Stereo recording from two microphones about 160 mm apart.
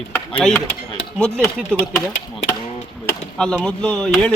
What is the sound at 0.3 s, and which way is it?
Speech, 5° left (ahead or behind).